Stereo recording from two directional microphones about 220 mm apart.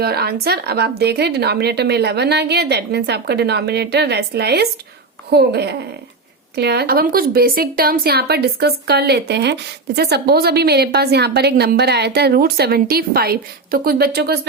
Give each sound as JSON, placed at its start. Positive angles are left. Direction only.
{"t": 0.0, "sound": "a woman's voice", "side_deg": -45}